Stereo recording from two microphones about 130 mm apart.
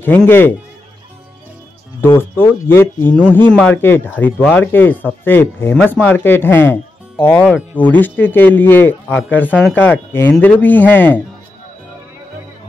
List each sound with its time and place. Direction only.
0.3 s speech: 15° left (ahead or behind)
2.0 s speech: 20° left (ahead or behind)